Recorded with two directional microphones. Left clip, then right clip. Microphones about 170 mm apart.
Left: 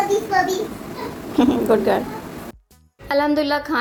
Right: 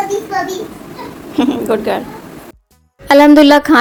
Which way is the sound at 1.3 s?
5° left (ahead or behind).